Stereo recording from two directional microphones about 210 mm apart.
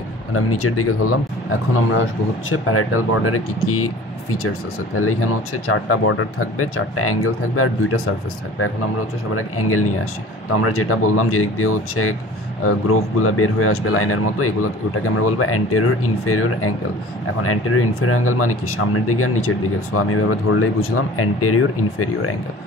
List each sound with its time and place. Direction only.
0.3 s speech: 90° left
2.5 s speech: 90° left
9.3 s speech: 90° left